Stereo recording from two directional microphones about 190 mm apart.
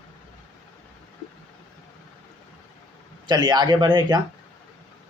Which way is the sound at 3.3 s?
20° right (ahead or behind).